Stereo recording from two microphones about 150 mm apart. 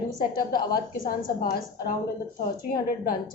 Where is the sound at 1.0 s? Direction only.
70° left (ahead or behind).